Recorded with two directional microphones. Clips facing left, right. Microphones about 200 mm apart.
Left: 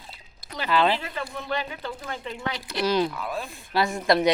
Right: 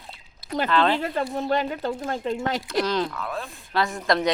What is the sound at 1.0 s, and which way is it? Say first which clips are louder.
Speech: right 8 dB; 45° right (ahead or behind).